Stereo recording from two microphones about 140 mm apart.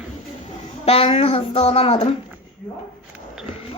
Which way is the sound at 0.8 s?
45° left (ahead or behind).